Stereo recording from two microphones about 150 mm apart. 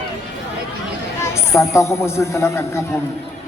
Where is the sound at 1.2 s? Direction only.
20° left (ahead or behind).